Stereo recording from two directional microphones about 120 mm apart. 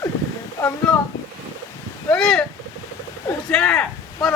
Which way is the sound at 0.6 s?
30° left (ahead or behind).